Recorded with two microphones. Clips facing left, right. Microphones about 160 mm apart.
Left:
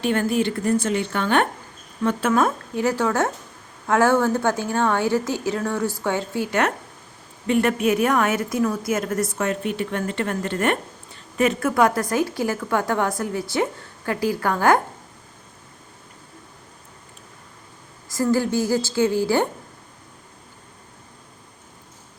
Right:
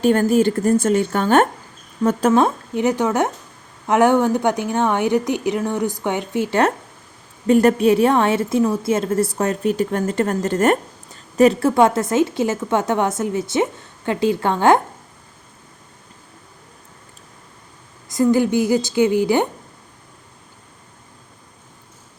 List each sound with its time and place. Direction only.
0.0 s a woman's voice: 40° right (ahead or behind)
2.3 s a woman's voice: 20° right (ahead or behind)
18.1 s a woman's voice: 20° right (ahead or behind)